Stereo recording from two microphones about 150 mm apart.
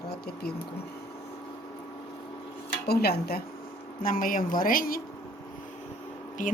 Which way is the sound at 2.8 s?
90° left.